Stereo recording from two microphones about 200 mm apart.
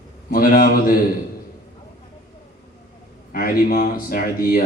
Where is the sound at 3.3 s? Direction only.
45° left (ahead or behind).